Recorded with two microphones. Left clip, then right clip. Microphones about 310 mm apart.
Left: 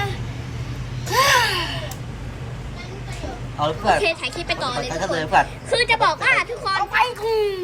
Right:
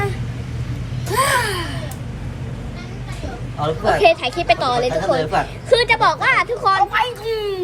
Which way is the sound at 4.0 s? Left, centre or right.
Centre.